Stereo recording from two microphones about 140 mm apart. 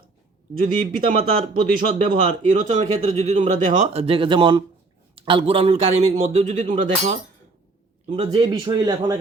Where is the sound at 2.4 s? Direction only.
65° right (ahead or behind).